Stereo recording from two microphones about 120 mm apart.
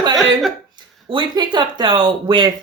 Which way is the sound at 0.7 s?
40° right (ahead or behind).